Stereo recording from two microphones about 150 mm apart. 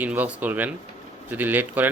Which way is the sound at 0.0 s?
10° right (ahead or behind).